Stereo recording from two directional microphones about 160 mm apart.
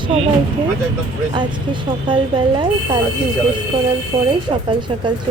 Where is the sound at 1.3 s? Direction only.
30° right (ahead or behind).